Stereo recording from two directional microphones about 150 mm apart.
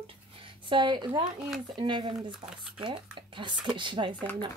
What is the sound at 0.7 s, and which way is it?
Speech, 30° right (ahead or behind).